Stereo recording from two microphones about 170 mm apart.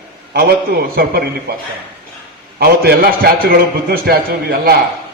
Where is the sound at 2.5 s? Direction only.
65° right (ahead or behind).